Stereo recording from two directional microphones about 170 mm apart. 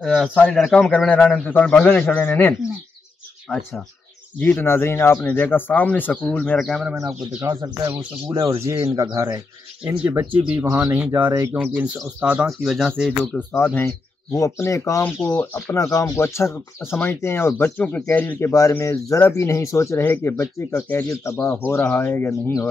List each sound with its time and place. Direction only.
0.0 s speech: 5° left (ahead or behind)
4.4 s speech: 10° left (ahead or behind)
7.4 s speech: 25° right (ahead or behind)
9.8 s speech: 10° right (ahead or behind); by 22.7 s 10° left (ahead or behind)